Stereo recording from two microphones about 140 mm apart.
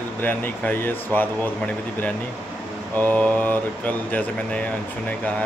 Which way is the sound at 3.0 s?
10° left (ahead or behind).